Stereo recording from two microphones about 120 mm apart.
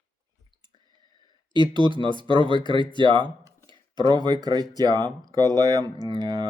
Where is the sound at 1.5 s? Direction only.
40° right (ahead or behind).